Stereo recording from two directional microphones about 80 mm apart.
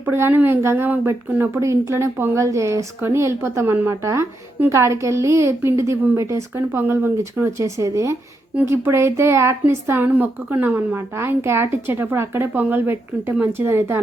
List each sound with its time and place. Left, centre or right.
0.0 s a woman's voice: right